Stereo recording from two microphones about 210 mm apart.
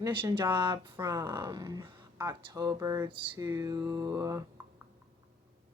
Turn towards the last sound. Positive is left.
turn(degrees=-15)  # may be behind; listen again after turning